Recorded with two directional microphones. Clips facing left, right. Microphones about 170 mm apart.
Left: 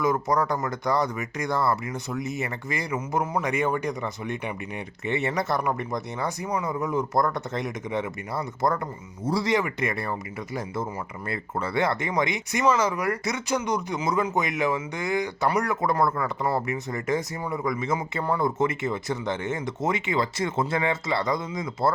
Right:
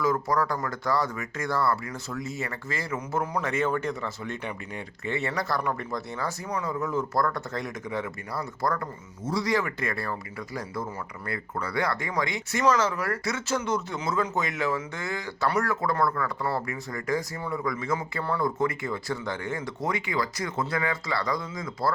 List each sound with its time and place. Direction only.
0.0 s speech: 20° left (ahead or behind)